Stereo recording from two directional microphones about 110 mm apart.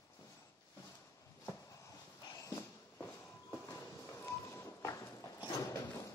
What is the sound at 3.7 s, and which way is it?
Music, 25° left (ahead or behind).